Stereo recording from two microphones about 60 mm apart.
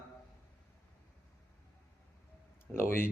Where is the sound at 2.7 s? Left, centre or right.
Left.